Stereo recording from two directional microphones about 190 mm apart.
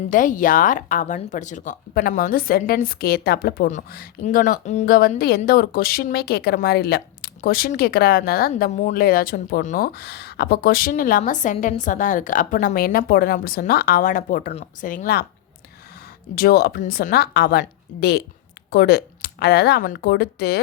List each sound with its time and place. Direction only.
0.1 s speech: 45° left (ahead or behind)
4.9 s speech: 50° left (ahead or behind)
16.3 s speech: 55° left (ahead or behind)